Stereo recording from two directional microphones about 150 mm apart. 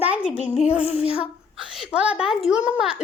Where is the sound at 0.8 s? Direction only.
40° left (ahead or behind).